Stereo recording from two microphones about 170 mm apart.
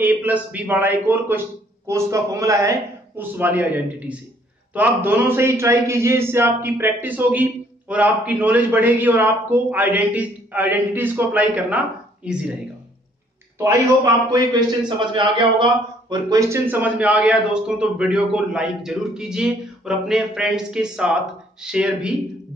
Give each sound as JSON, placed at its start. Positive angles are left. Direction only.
{"t": 0.0, "sound": "a man's voice", "side_deg": -10}
{"t": 13.6, "sound": "a man's voice", "side_deg": -15}